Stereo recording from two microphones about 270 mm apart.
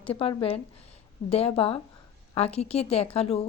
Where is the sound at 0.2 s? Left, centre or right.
Centre.